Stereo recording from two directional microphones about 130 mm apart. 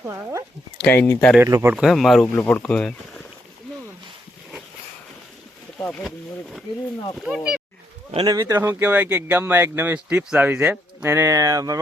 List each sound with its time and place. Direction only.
0.0 s speech: 20° right (ahead or behind)
0.8 s speech: 15° left (ahead or behind)
1.5 s speech: 25° right (ahead or behind)
1.7 s speech: centre (ahead or behind)
2.2 s speech: 15° left (ahead or behind)
5.9 s speech: centre (ahead or behind)
8.1 s speech: 35° right (ahead or behind)